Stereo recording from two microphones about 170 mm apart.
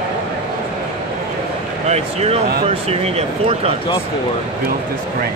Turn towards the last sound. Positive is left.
turn(degrees=-35)  # may be behind; listen again after turning